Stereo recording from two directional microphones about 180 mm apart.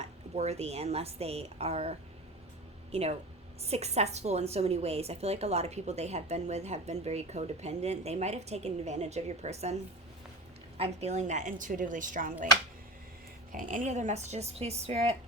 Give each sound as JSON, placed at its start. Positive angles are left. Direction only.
{"t": 0.0, "sound": "a woman's voice", "side_deg": -35}
{"t": 10.8, "sound": "chopping", "side_deg": -35}
{"t": 13.5, "sound": "a woman's voice", "side_deg": -45}